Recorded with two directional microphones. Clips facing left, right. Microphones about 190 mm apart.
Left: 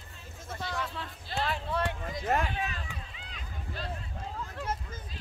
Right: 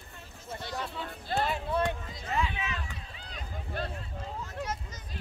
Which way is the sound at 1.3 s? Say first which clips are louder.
Right 4 dB; 50° right (ahead or behind).